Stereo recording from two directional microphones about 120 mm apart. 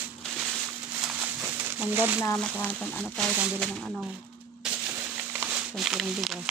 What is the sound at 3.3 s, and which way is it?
Speech, 10° right (ahead or behind).